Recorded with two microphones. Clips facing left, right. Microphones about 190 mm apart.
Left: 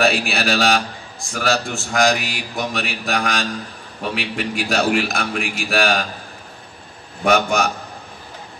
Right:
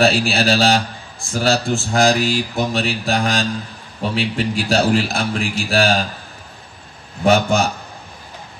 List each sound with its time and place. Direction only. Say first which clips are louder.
0.0 s a man's voice: right 3 dB; 30° right (ahead or behind)
7.2 s a man's voice: right 2 dB; 30° right (ahead or behind)